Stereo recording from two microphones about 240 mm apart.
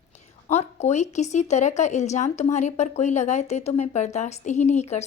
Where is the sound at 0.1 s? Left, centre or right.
Left.